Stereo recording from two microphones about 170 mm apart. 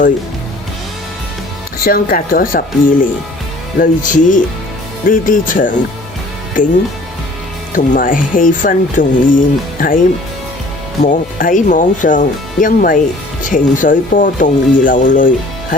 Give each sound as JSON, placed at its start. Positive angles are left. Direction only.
{"t": 1.8, "sound": "speech", "side_deg": 60}
{"t": 7.8, "sound": "speech", "side_deg": 50}
{"t": 11.0, "sound": "speech", "side_deg": 50}